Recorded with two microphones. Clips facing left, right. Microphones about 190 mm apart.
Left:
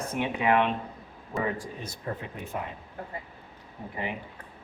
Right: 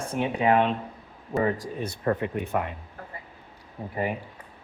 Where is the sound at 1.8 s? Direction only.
65° right (ahead or behind).